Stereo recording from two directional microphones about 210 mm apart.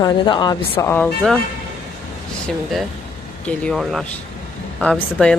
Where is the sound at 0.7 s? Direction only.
10° left (ahead or behind).